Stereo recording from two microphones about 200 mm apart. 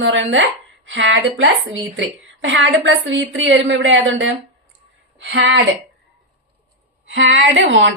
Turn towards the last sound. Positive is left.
turn(degrees=-65)  # may be behind; listen again after turning